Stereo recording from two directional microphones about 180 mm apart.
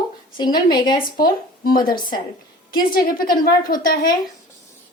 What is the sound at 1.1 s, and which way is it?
Speech, 50° left (ahead or behind).